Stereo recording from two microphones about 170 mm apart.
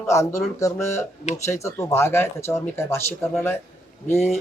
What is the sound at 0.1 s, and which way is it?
Speech, 15° left (ahead or behind).